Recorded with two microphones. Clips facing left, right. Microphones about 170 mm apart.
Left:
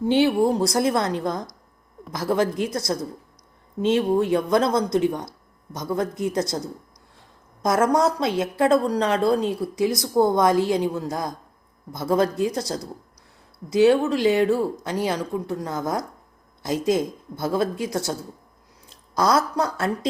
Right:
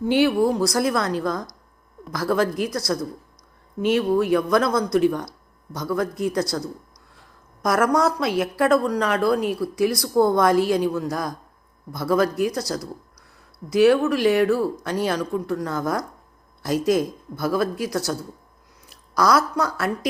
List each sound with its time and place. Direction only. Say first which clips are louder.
0.1 s a woman's voice: even; 25° left (ahead or behind)